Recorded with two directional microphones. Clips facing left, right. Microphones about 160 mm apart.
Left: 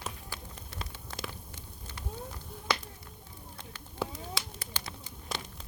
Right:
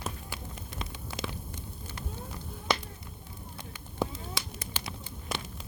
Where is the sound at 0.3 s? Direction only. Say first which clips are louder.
Right 3 dB; 15° right (ahead or behind).